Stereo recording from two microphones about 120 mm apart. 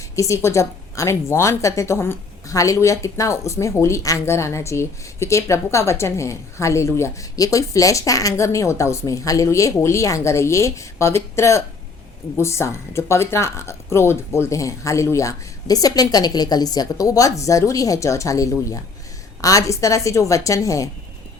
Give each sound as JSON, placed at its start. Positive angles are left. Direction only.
{"t": 0.2, "sound": "a woman's voice", "side_deg": 25}